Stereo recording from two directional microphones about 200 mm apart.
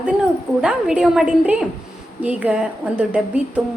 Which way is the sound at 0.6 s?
5° right (ahead or behind).